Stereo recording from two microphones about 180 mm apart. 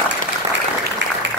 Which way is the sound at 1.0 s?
90° right.